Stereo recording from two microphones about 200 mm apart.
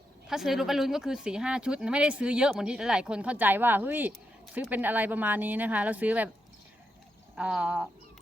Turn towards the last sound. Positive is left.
turn(degrees=-5)  # may be behind; listen again after turning